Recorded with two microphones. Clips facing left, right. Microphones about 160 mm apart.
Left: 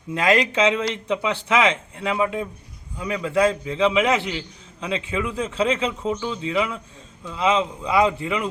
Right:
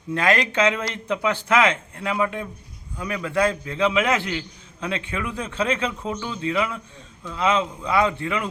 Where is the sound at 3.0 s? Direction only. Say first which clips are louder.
Left 2 dB; 25° left (ahead or behind).